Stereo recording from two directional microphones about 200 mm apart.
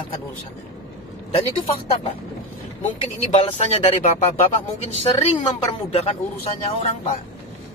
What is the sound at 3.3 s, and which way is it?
Speech, 30° left (ahead or behind).